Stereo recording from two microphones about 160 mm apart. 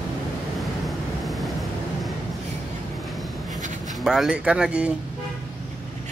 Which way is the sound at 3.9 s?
Centre (ahead or behind).